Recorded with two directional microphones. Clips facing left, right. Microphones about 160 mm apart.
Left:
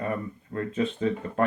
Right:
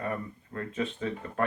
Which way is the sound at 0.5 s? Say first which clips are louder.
Left 5 dB; 30° left (ahead or behind).